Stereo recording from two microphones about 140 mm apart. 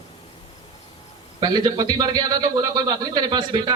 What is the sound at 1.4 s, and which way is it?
A man's voice, 30° right (ahead or behind).